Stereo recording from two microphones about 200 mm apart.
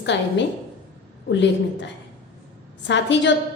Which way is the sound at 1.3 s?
60° left (ahead or behind).